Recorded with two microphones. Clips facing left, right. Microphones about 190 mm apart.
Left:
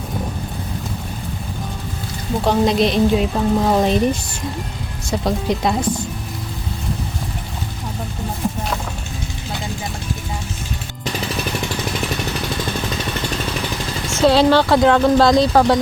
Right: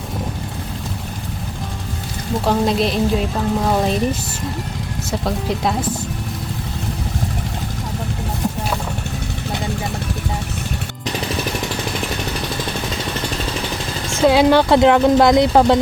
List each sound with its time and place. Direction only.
2.4 s speech: centre (ahead or behind)
14.1 s speech: 15° right (ahead or behind)